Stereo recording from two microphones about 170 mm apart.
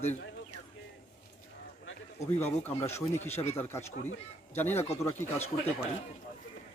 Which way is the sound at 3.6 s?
15° left (ahead or behind).